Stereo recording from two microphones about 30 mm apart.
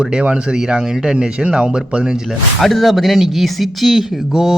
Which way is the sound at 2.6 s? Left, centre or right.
Centre.